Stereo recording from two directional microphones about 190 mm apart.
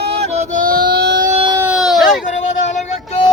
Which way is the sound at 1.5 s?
10° right (ahead or behind).